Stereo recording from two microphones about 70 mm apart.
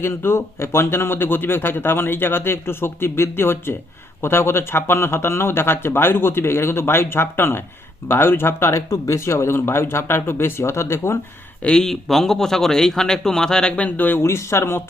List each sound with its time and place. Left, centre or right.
0.0 s speech: left
11.6 s a man's voice: centre
14.2 s speech: left